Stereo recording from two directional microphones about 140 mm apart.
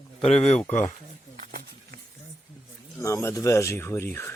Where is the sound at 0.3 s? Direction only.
50° left (ahead or behind).